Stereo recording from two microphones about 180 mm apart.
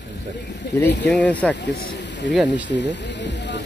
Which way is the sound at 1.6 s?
70° left (ahead or behind).